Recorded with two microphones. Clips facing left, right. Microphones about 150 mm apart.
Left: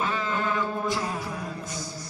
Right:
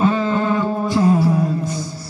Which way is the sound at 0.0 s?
35° right (ahead or behind).